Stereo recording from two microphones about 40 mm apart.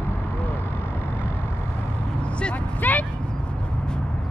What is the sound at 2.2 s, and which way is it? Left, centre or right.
Vehicle, left.